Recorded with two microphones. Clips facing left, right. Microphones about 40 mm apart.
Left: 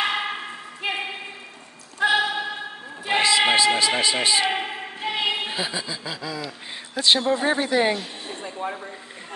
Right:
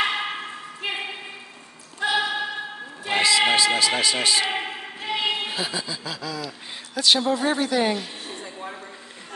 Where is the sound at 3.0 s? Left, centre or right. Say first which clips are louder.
Left 1 dB; centre.